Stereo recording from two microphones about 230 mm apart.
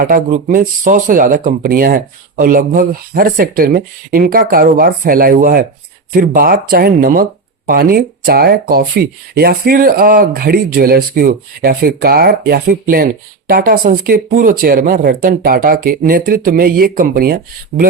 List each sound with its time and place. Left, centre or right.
0.0 s speech: right